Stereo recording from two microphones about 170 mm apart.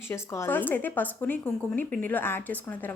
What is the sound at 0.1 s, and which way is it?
Speech, 15° left (ahead or behind).